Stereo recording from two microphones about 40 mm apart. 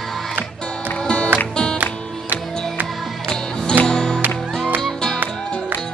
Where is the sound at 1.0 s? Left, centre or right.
Left.